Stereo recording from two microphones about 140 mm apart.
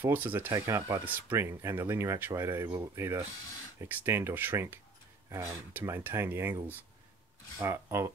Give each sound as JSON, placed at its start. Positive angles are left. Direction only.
{"t": 0.0, "sound": "speech", "side_deg": -15}
{"t": 7.6, "sound": "speech", "side_deg": -20}